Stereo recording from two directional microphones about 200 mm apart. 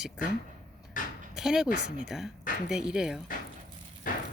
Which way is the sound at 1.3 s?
5° right (ahead or behind).